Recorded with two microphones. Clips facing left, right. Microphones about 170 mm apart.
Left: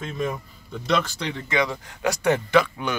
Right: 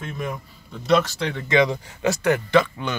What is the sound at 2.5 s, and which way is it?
Speech, 10° left (ahead or behind).